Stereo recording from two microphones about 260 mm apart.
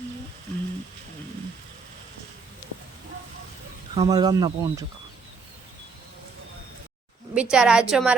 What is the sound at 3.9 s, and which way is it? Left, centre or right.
Speech, centre.